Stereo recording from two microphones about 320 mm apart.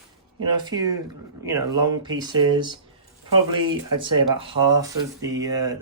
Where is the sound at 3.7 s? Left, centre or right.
Right.